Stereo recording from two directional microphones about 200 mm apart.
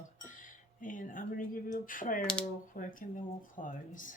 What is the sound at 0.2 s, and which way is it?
Speech, 40° left (ahead or behind).